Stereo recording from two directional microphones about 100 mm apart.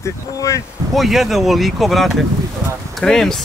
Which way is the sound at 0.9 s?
Centre (ahead or behind).